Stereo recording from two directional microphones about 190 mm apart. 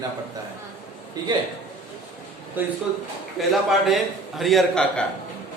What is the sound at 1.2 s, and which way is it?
Speech, 20° right (ahead or behind).